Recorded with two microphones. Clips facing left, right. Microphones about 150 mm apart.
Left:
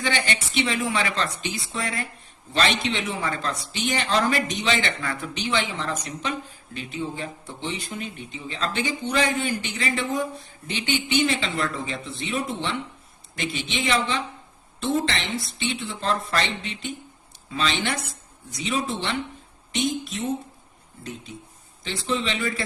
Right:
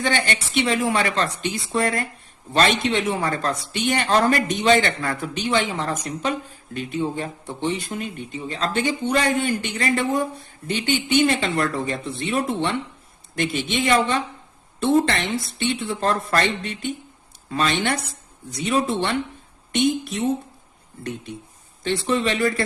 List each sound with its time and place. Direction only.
0.0 s a man's voice: 45° right (ahead or behind)
17.5 s a man's voice: 50° right (ahead or behind)
19.7 s speech: 65° right (ahead or behind)
21.8 s a man's voice: 50° right (ahead or behind)